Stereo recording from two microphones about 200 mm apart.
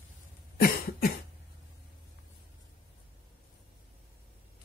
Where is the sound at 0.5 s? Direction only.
50° left (ahead or behind).